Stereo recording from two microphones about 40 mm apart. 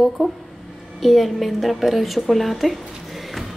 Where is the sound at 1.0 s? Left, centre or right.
Centre.